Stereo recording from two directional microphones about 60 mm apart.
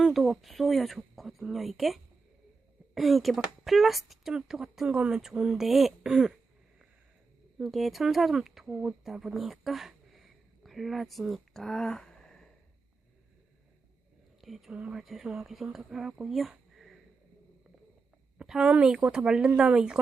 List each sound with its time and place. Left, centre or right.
0.0 s speech: centre
7.6 s speech: centre
8.6 s speech: centre
9.2 s a sound: centre
14.4 s speech: centre
14.7 s speech: centre
14.9 s speech: centre
16.1 s a sound: centre
18.4 s speech: centre